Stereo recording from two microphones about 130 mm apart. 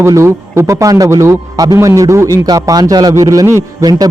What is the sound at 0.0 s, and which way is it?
A man's voice, 20° right (ahead or behind).